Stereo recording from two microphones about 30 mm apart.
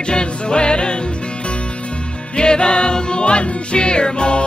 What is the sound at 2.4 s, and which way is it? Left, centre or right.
Speech, left.